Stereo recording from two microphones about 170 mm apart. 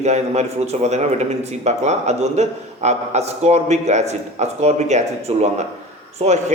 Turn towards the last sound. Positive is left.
turn(degrees=-40)  # may be behind; listen again after turning